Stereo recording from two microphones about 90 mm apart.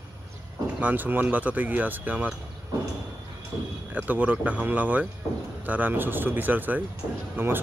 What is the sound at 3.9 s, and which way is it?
Speech, 20° right (ahead or behind).